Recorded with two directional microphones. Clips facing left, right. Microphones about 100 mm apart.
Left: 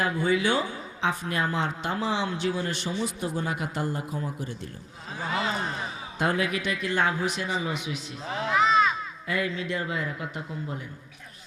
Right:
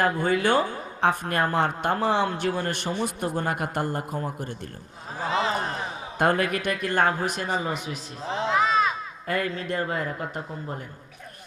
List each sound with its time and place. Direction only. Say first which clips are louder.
0.0 s speech: right 2 dB; 50° right (ahead or behind)
5.3 s a man's voice: right 4 dB; 25° right (ahead or behind)
6.1 s speech: right 4 dB; 50° right (ahead or behind)
8.3 s a man's voice: right 3 dB; 25° right (ahead or behind)
9.2 s speech: right 2 dB; 45° right (ahead or behind)